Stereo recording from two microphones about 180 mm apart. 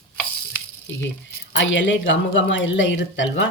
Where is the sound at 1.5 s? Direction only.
90° left.